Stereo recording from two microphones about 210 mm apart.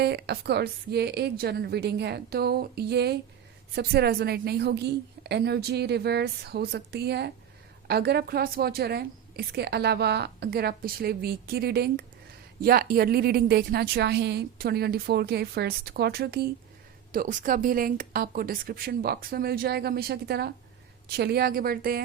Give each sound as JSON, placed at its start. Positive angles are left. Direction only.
{"t": 0.0, "sound": "a woman's voice", "side_deg": -50}
{"t": 17.1, "sound": "a woman's voice", "side_deg": -40}